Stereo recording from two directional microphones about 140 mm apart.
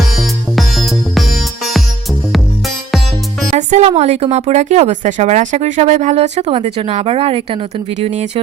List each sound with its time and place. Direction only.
0.2 s music: centre (ahead or behind)
3.5 s music: 60° right (ahead or behind)
3.8 s speech: 50° right (ahead or behind)